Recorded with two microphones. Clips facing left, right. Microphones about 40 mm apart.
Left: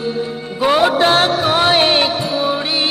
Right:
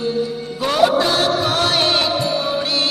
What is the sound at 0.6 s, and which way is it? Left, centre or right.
Music, left.